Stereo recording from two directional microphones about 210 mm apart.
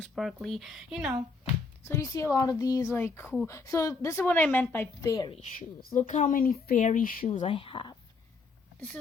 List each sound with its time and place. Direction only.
0.0 s speech: centre (ahead or behind)
1.8 s speech: 15° left (ahead or behind)
5.4 s speech: 40° left (ahead or behind); by 7.9 s 25° left (ahead or behind)